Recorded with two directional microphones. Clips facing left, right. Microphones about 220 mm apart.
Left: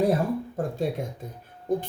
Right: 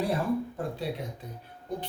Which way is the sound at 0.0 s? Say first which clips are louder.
Left 4 dB; 45° left (ahead or behind).